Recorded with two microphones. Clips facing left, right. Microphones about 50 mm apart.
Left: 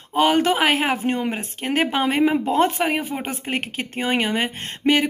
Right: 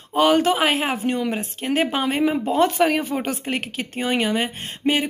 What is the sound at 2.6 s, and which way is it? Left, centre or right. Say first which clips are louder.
Speech: right 2 dB; left.